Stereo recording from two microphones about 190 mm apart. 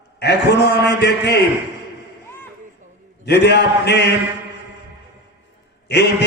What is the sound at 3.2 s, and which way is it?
Speech, 60° left (ahead or behind).